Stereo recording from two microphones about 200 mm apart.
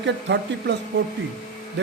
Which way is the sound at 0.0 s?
60° right (ahead or behind).